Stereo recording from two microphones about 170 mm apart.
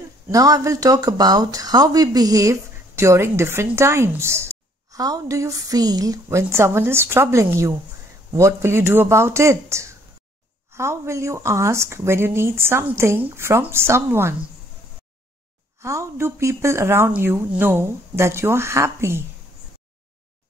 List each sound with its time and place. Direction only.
0.3 s speech: 20° right (ahead or behind)
15.8 s speech: 15° right (ahead or behind)